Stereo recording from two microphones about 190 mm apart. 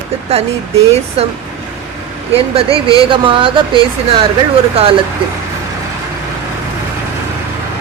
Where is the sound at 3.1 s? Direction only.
25° right (ahead or behind).